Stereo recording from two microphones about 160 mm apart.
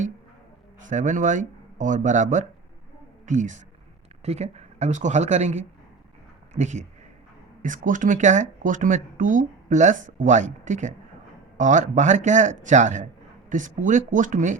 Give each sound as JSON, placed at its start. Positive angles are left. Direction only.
{"t": 0.8, "sound": "speech", "side_deg": -50}